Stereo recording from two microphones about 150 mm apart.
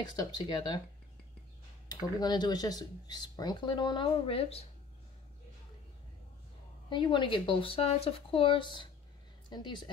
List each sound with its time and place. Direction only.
0.0 s speech: 25° left (ahead or behind)
1.9 s speech: 25° left (ahead or behind)
6.9 s speech: 30° left (ahead or behind)